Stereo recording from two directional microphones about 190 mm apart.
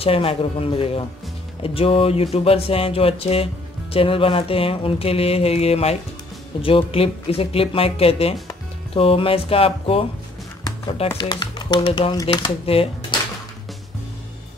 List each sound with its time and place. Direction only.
0.0 s speech: 30° left (ahead or behind)
11.1 s speech: 25° left (ahead or behind)